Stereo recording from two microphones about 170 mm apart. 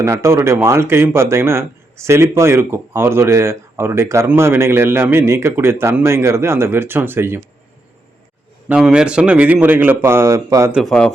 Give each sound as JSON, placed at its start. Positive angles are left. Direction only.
{"t": 0.0, "sound": "speech", "side_deg": -15}
{"t": 8.7, "sound": "speech", "side_deg": -5}
{"t": 10.7, "sound": "speech", "side_deg": 0}